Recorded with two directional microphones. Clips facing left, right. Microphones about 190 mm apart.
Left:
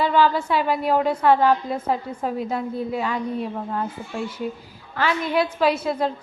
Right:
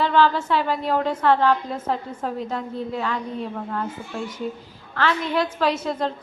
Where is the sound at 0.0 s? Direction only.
10° left (ahead or behind).